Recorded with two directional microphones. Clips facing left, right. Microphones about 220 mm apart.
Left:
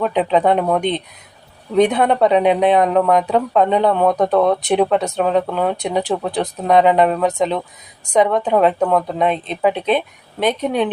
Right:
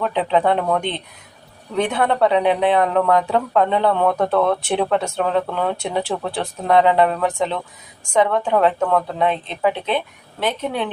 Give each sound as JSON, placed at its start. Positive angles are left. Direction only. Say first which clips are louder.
{"t": 0.0, "sound": "speech", "louder": "left 3 dB", "side_deg": 20}